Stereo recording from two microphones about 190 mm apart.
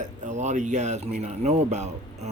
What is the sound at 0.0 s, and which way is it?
Speech, 40° right (ahead or behind).